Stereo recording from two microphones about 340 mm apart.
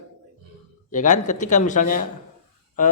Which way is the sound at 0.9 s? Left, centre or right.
Left.